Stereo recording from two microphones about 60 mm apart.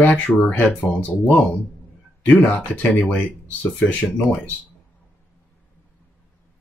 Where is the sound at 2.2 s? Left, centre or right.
Left.